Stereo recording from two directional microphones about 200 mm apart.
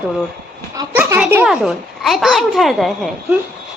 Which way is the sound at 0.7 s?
10° right (ahead or behind).